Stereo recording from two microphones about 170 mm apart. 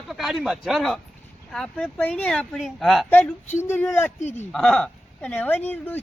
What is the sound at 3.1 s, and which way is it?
Speech, 10° left (ahead or behind).